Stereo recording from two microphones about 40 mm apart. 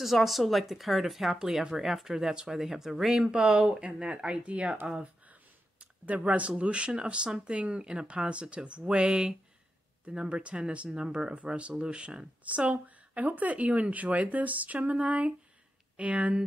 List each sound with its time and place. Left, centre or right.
0.0 s speech: centre; by 4.7 s right
4.9 s a sound: right
6.5 s speech: right
7.5 s speech: right
12.4 s speech: right